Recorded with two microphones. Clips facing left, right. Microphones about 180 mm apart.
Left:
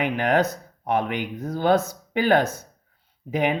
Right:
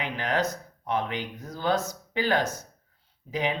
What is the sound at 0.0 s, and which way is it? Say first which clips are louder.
Speech: left 7 dB; 55° left (ahead or behind).